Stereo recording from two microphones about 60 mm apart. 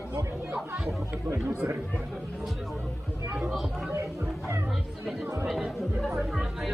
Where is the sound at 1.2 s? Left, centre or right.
Right.